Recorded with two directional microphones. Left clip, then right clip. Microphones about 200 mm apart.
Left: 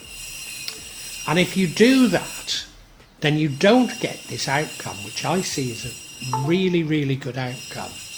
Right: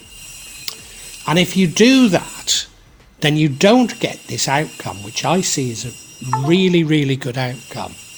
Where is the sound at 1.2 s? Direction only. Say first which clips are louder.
Right 4 dB; 35° right (ahead or behind).